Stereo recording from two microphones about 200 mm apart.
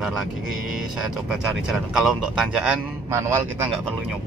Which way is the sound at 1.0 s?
Centre (ahead or behind).